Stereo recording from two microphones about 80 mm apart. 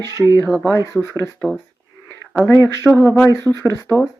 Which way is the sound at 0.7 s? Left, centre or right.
Left.